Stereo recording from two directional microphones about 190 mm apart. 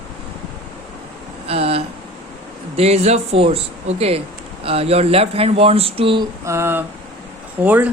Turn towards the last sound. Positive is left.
turn(degrees=-10)  # may be behind; listen again after turning